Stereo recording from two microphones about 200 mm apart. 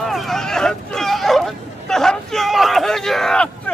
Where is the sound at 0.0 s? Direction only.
Centre (ahead or behind).